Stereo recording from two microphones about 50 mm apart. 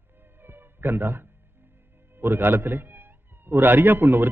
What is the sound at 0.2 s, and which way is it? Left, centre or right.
Music, right.